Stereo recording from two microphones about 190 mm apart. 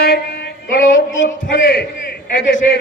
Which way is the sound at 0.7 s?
90° left.